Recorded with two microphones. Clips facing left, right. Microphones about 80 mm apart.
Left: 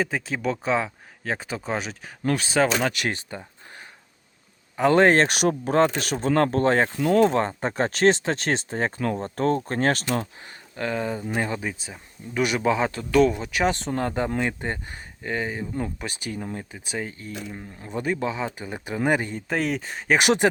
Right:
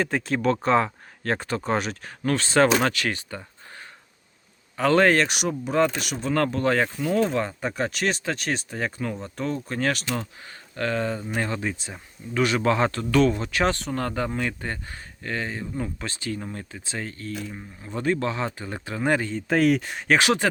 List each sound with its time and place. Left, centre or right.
0.0 s speech: centre
2.2 s speech: centre
2.9 s speech: left
5.2 s speech: left
6.9 s speech: left
7.2 s speech: left
10.4 s speech: centre
19.5 s speech: centre
20.1 s speech: left